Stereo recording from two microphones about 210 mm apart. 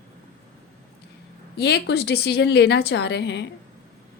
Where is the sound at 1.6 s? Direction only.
50° left (ahead or behind).